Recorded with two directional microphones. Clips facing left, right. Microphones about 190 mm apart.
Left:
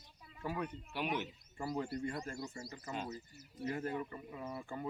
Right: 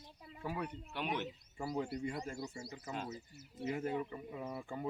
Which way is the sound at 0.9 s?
5° left (ahead or behind).